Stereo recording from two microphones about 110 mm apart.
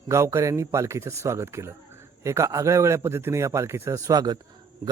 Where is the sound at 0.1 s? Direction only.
25° right (ahead or behind).